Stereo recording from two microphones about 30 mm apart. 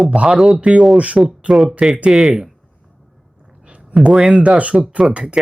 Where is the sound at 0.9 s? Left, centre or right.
Right.